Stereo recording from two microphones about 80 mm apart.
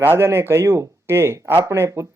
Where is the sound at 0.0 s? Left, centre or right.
Right.